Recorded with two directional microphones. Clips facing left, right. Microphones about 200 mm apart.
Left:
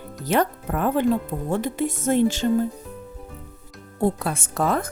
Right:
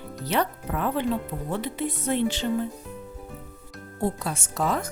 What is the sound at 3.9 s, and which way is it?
Speech, 55° left (ahead or behind).